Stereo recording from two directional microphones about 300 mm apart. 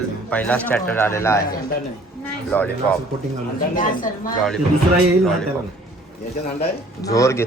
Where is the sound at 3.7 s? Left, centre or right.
Left.